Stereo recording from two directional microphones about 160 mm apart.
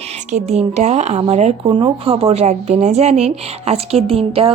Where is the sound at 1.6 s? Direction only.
30° right (ahead or behind).